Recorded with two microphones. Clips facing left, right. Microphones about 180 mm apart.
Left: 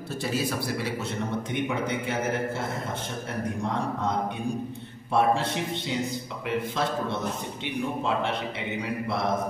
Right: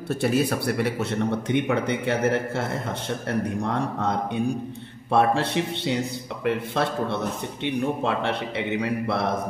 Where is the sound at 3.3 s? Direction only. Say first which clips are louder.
Right 8 dB; 65° right (ahead or behind).